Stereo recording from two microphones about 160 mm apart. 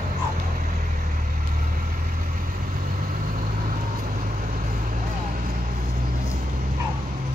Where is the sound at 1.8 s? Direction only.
65° right (ahead or behind).